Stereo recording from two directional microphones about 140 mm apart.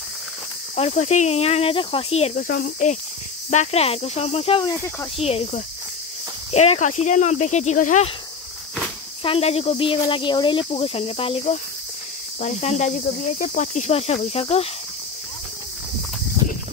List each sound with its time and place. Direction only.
0.7 s cricket: 50° left (ahead or behind)
2.3 s speech: 90° left; by 3.0 s 75° left (ahead or behind)
3.4 s cricket: 50° left (ahead or behind)
6.5 s speech: 50° left (ahead or behind)
9.2 s speech: 45° left (ahead or behind)
12.4 s cricket: 50° left (ahead or behind)